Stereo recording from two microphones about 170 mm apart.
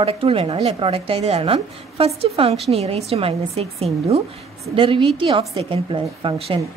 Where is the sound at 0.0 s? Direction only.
35° right (ahead or behind).